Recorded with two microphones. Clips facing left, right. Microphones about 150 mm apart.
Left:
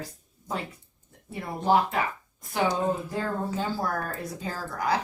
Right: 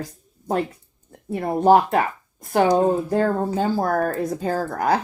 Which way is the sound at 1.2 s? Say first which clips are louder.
Right 9 dB; 55° right (ahead or behind).